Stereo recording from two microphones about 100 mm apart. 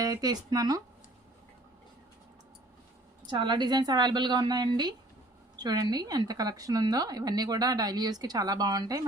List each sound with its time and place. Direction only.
0.0 s speech: 40° right (ahead or behind)
3.2 s a woman's voice: 50° right (ahead or behind)